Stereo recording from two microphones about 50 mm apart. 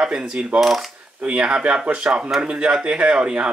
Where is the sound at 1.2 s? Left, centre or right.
Right.